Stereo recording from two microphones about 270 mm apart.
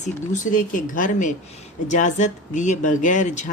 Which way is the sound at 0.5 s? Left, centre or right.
Left.